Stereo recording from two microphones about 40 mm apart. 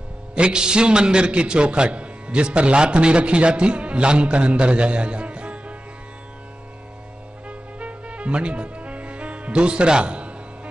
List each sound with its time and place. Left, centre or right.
0.3 s a man's voice: right
7.4 s music: right